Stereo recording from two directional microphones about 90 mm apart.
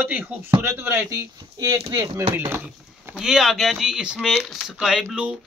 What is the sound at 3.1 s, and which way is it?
Speech, 5° right (ahead or behind).